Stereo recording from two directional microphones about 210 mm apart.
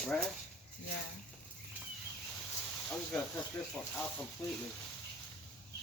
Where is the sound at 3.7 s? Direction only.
5° left (ahead or behind).